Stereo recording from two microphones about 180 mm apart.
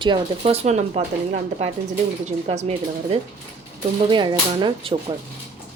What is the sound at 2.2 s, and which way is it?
Speech, 40° right (ahead or behind).